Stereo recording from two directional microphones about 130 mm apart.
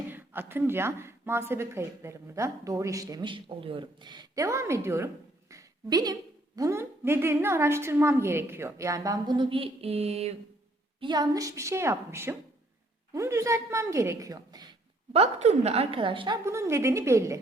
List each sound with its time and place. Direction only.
0.1 s speech: 15° right (ahead or behind); by 10.3 s 55° right (ahead or behind)
11.0 s speech: 30° right (ahead or behind)
15.1 s a woman's voice: 55° right (ahead or behind); by 16.4 s 40° right (ahead or behind)
16.5 s speech: 20° right (ahead or behind)